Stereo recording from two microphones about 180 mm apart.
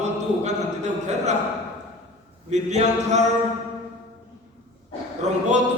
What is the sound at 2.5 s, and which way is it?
Speech, 40° right (ahead or behind).